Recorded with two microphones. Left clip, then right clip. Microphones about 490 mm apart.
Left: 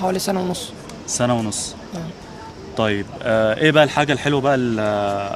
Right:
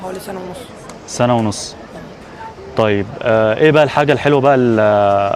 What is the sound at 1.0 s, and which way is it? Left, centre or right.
Speech, right.